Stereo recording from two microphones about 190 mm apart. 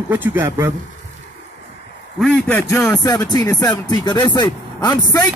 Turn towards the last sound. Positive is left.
turn(degrees=20)  # may be behind; listen again after turning